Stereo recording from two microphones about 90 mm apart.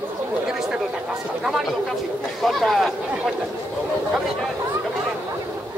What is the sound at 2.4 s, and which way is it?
Speech, centre (ahead or behind).